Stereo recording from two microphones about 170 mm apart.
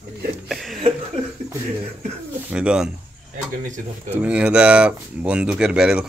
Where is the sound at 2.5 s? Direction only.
5° right (ahead or behind).